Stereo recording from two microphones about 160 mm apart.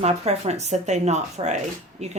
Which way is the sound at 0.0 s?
45° right (ahead or behind).